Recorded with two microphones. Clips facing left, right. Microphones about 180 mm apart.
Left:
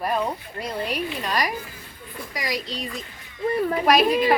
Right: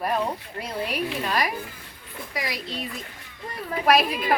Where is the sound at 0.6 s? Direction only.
5° right (ahead or behind).